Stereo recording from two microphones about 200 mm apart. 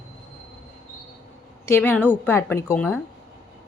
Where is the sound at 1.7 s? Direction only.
10° left (ahead or behind).